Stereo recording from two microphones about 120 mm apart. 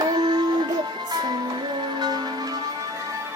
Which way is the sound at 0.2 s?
35° right (ahead or behind).